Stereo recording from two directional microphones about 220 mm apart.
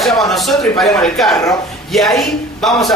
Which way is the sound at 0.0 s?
Centre (ahead or behind).